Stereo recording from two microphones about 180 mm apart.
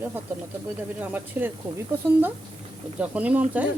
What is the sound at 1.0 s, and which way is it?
Speech, 10° right (ahead or behind).